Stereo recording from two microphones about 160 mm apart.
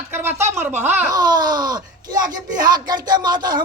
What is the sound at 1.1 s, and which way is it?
Speech, 25° right (ahead or behind).